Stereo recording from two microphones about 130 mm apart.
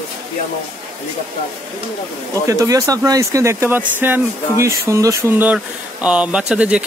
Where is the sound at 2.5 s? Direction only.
25° right (ahead or behind); by 6.8 s 10° right (ahead or behind).